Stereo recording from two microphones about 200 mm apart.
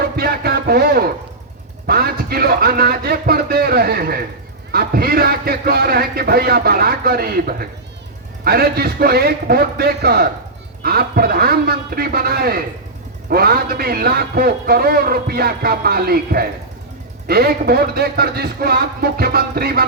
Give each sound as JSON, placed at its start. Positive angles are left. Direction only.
{"t": 0.0, "sound": "music", "side_deg": -50}
{"t": 1.9, "sound": "a man's voice", "side_deg": -50}